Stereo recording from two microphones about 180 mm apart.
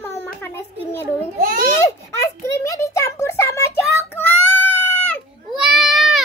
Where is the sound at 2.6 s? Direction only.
15° left (ahead or behind).